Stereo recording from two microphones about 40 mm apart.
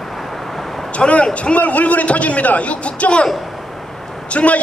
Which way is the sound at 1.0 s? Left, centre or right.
Left.